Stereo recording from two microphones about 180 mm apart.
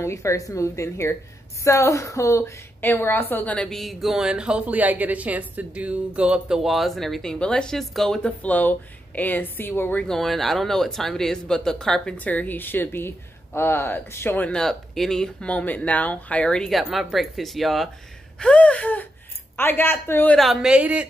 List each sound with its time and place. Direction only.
0.0 s a woman's voice: 15° left (ahead or behind)
20.3 s a woman's voice: centre (ahead or behind)